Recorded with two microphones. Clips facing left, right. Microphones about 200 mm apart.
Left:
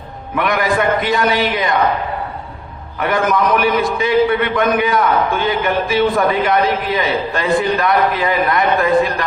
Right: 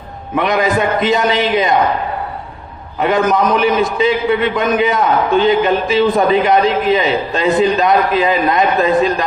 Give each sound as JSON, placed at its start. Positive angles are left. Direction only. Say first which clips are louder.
{"t": 0.3, "sound": "a man's voice", "louder": "right 2 dB", "side_deg": -20}
{"t": 3.0, "sound": "a man's voice", "louder": "right 3 dB", "side_deg": -20}